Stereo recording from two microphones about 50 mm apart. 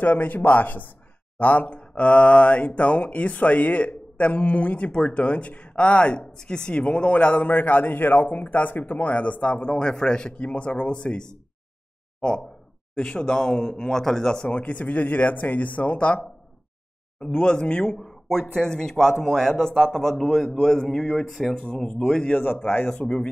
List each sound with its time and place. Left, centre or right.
0.0 s speech: left; by 14.5 s centre
14.5 s speech: left
17.9 s speech: centre
22.3 s speech: left
22.8 s speech: centre